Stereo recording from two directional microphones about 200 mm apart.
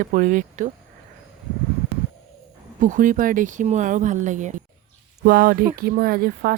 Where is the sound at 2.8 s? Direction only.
40° right (ahead or behind).